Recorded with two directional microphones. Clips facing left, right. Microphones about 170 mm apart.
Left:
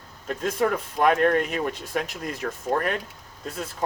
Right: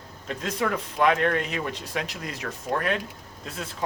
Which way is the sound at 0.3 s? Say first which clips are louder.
Left 3 dB; 45° left (ahead or behind).